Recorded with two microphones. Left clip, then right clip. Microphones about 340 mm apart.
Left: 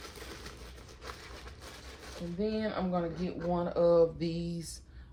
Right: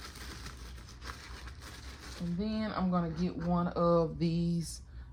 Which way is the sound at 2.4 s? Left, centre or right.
Centre.